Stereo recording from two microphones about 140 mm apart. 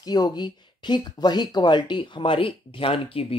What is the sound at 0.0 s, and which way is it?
Speech, 30° left (ahead or behind).